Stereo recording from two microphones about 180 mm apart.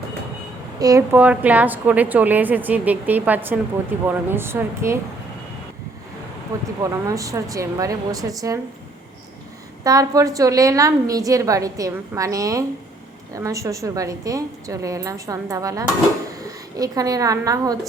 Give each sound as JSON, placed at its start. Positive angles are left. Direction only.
{"t": 0.8, "sound": "a woman's voice", "side_deg": -20}
{"t": 6.5, "sound": "a woman's voice", "side_deg": -20}
{"t": 9.8, "sound": "a woman's voice", "side_deg": -20}